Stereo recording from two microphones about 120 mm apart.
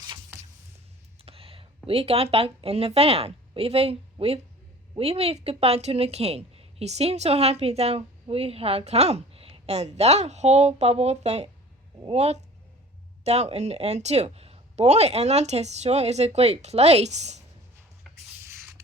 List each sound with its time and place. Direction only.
1.2 s speech: 50° right (ahead or behind); by 17.4 s 70° right (ahead or behind)